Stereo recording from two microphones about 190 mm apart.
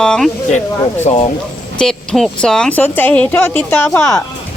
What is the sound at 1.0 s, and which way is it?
Speech, 30° left (ahead or behind).